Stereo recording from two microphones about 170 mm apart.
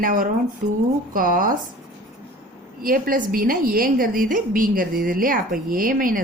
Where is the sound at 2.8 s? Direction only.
55° right (ahead or behind).